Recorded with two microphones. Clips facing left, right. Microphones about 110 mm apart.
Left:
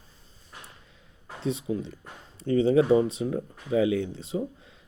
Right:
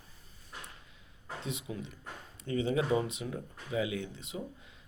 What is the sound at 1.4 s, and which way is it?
Speech, 35° left (ahead or behind).